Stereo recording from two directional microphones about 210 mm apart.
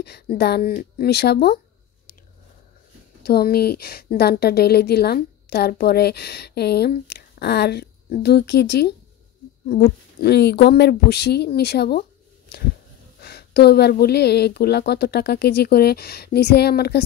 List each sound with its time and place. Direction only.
0.0 s speech: 50° left (ahead or behind)
3.3 s a woman's voice: 50° left (ahead or behind)
13.2 s a woman's voice: 50° left (ahead or behind)